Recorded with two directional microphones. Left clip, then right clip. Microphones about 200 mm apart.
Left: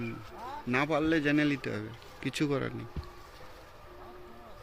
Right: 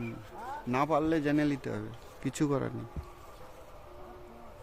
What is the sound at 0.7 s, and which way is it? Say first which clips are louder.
Speech: even; 15° right (ahead or behind).